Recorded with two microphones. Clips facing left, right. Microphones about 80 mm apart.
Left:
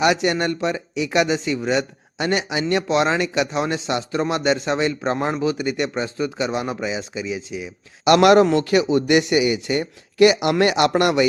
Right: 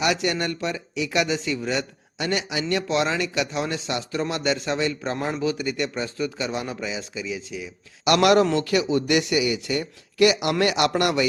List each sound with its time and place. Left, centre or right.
0.0 s a man's voice: left